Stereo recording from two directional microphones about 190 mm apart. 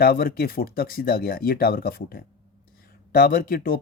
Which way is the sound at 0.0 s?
50° left (ahead or behind).